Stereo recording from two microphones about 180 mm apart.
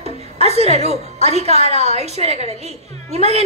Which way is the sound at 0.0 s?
35° right (ahead or behind).